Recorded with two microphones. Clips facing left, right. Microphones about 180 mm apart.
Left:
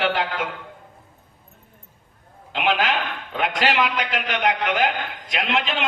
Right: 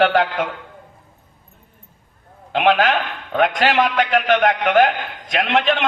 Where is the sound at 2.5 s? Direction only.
55° right (ahead or behind).